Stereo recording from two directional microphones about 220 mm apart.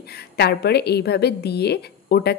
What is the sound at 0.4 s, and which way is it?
A woman's voice, 45° left (ahead or behind).